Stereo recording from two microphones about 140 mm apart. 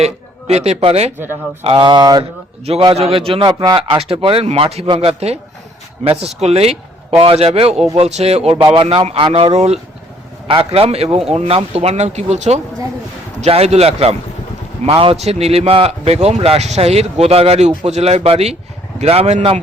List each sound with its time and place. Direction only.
0.0 s a man's voice: 50° right (ahead or behind)
1.6 s speech: 35° right (ahead or behind)
2.6 s a man's voice: 45° right (ahead or behind)